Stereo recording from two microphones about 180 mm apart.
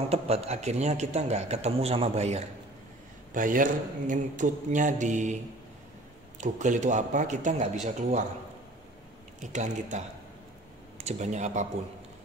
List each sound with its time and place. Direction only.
0.1 s a man's voice: 35° right (ahead or behind)
3.3 s speech: 50° right (ahead or behind)
6.4 s speech: 45° right (ahead or behind)
9.4 s a man's voice: 40° right (ahead or behind)